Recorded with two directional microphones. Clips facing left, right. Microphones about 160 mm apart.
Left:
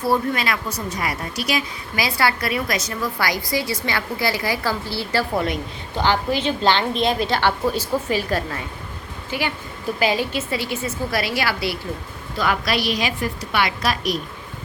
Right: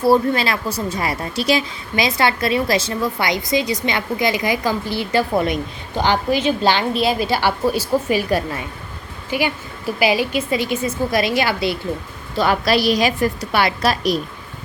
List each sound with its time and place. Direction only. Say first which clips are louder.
0.0 s a woman's voice: right 5 dB; 30° right (ahead or behind)
12.4 s a woman's voice: right 5 dB; 35° right (ahead or behind)